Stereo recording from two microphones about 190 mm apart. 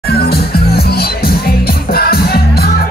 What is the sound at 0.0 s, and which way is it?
Music, 55° left (ahead or behind).